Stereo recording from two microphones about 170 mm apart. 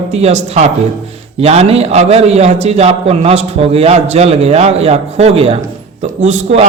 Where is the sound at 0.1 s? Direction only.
40° right (ahead or behind).